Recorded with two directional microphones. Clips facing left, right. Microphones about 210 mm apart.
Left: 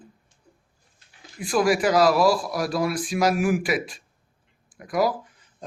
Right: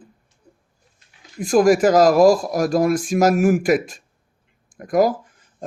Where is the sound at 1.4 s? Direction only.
45° right (ahead or behind).